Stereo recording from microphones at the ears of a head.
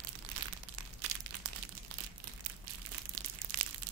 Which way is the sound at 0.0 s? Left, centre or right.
Right.